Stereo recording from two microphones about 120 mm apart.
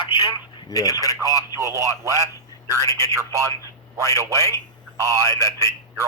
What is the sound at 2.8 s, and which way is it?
Speech, 25° left (ahead or behind).